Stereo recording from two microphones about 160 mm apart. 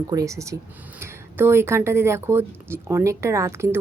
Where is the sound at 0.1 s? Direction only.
20° right (ahead or behind).